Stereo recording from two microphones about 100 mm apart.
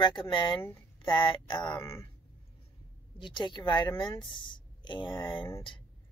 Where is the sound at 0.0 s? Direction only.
50° left (ahead or behind).